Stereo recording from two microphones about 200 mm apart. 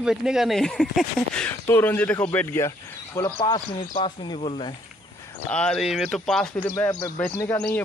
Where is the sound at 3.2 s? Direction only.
20° left (ahead or behind).